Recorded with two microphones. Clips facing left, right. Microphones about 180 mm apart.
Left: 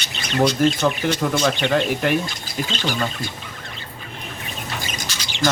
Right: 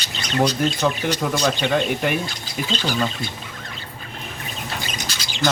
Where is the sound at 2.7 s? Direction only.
40° right (ahead or behind).